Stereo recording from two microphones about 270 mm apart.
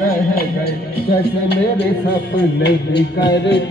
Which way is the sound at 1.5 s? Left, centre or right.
Left.